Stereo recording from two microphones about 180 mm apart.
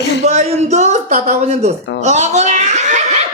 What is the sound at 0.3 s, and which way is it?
Speech, 40° right (ahead or behind).